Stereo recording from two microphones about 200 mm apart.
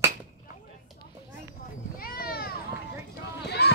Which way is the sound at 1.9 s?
50° left (ahead or behind).